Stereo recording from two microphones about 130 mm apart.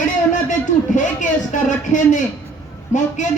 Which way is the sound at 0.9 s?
75° left (ahead or behind).